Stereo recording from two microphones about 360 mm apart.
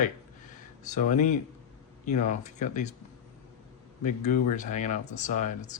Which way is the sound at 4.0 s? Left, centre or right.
Centre.